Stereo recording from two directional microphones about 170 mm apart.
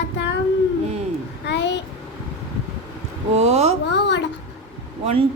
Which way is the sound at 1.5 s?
90° left.